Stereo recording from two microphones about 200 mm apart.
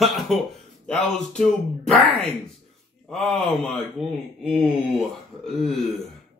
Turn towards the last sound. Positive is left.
turn(degrees=0)  # may be behind; listen again after turning